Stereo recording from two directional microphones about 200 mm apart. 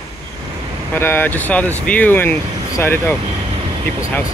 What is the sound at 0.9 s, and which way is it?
Speech, 10° left (ahead or behind).